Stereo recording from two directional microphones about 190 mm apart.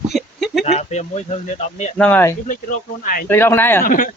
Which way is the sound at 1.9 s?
10° left (ahead or behind).